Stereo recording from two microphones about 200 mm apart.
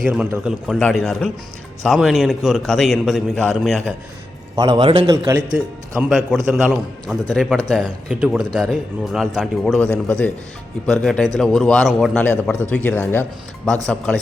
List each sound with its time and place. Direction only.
0.0 s a man's voice: 5° right (ahead or behind)
4.5 s a man's voice: 20° right (ahead or behind)
5.5 s a man's voice: 5° right (ahead or behind)